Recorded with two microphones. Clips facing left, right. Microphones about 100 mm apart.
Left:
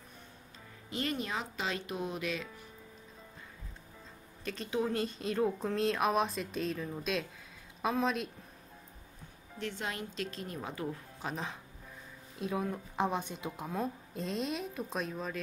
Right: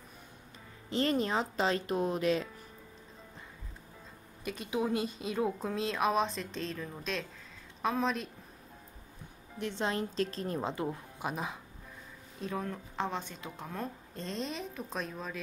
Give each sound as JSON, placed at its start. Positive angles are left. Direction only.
{"t": 0.8, "sound": "speech", "side_deg": -30}
{"t": 4.5, "sound": "a woman's voice", "side_deg": -10}
{"t": 9.6, "sound": "speech", "side_deg": -25}
{"t": 10.7, "sound": "speech", "side_deg": -20}
{"t": 11.2, "sound": "speech", "side_deg": -5}
{"t": 12.4, "sound": "a woman's voice", "side_deg": 5}